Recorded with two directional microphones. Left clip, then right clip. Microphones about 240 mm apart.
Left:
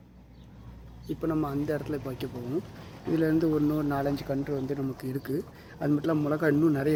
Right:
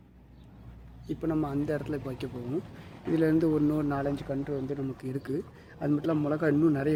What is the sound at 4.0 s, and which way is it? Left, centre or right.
Speech, centre.